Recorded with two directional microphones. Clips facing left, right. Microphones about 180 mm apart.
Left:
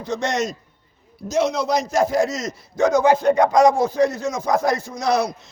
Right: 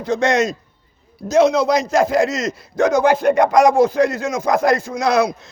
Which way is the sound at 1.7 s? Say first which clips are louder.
Right 3 dB; 90° right.